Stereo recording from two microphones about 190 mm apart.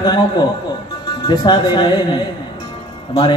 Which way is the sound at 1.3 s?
25° left (ahead or behind).